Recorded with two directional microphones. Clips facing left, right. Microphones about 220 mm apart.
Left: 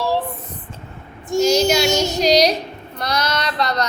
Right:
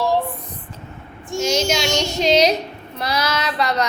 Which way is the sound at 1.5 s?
Centre (ahead or behind).